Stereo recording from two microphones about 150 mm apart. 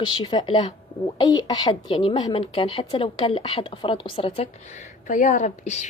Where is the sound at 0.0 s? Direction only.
35° left (ahead or behind).